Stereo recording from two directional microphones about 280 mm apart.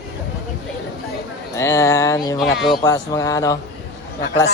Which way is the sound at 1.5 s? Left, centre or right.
Centre.